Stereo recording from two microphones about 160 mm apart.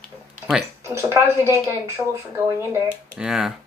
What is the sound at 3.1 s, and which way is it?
Speech, 5° right (ahead or behind).